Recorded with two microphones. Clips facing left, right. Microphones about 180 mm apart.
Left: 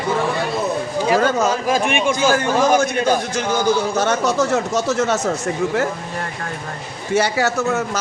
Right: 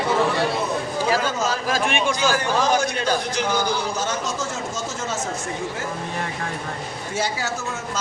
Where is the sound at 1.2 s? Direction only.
60° left (ahead or behind).